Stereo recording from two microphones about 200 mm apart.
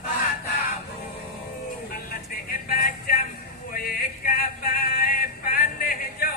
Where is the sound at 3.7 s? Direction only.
45° left (ahead or behind).